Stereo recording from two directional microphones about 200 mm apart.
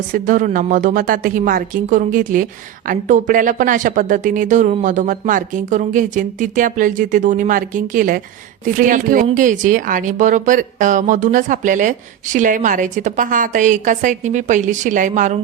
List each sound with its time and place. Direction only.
0.1 s a woman's voice: 40° right (ahead or behind)